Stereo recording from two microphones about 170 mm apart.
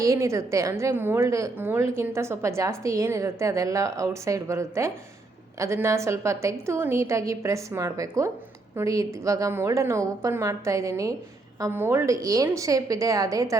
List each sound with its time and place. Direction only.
0.0 s a woman's voice: 20° right (ahead or behind)